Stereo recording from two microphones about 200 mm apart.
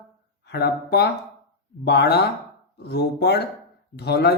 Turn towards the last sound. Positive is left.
turn(degrees=55)  # may be behind; listen again after turning